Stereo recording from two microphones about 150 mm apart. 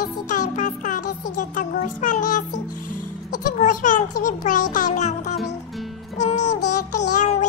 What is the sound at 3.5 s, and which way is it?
Music, 55° left (ahead or behind).